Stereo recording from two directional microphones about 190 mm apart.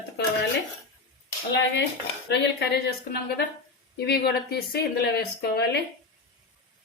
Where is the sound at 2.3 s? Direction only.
65° left (ahead or behind).